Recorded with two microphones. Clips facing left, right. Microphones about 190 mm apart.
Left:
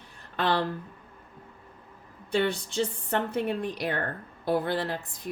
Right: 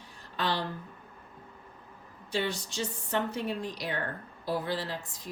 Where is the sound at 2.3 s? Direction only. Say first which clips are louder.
Left 5 dB; 55° left (ahead or behind).